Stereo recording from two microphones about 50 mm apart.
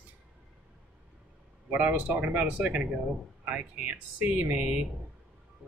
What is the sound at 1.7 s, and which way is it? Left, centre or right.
Speech, right.